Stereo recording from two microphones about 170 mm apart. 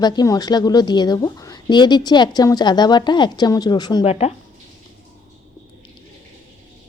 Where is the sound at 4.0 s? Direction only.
40° left (ahead or behind).